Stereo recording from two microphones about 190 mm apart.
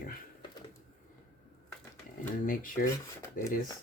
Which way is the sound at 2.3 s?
45° left (ahead or behind).